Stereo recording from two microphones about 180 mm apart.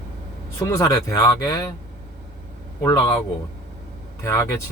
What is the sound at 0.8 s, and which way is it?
Speech, 20° left (ahead or behind).